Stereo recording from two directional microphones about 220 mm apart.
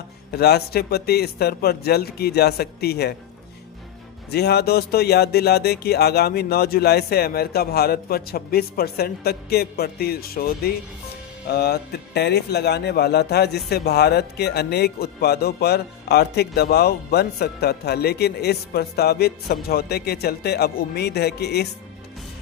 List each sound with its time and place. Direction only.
0.3 s speech: 45° left (ahead or behind)
4.3 s speech: 45° left (ahead or behind)